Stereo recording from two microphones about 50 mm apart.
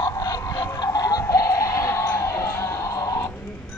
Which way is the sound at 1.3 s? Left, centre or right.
Left.